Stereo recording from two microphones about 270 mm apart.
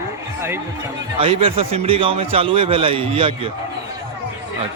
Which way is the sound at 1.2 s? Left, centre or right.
Right.